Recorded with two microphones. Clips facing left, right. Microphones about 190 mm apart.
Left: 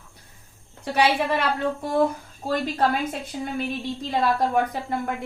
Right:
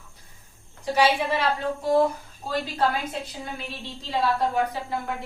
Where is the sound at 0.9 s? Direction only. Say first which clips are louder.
Even; 65° left (ahead or behind).